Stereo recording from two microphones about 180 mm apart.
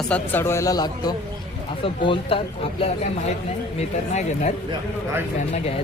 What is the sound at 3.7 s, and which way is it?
Speech, 35° left (ahead or behind).